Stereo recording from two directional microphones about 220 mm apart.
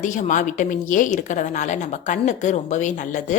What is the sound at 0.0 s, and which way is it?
A woman's voice, 35° left (ahead or behind).